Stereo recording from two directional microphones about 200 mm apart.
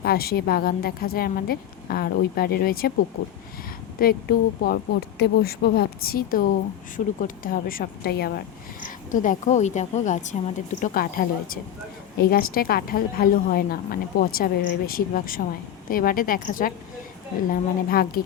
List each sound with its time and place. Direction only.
0.0 s a woman's voice: 50° left (ahead or behind)
4.0 s a woman's voice: 45° left (ahead or behind)